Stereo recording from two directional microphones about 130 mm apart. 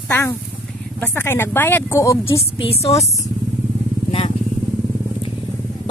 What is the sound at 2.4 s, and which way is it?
Speech, 50° left (ahead or behind).